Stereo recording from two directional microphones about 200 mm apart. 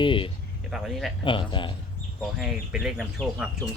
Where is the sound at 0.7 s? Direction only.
Centre (ahead or behind).